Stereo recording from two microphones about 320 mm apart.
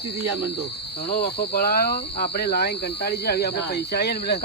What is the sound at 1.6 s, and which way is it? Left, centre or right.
Speech, left.